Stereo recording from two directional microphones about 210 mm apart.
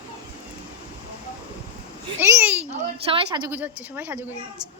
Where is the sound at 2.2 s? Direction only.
10° right (ahead or behind).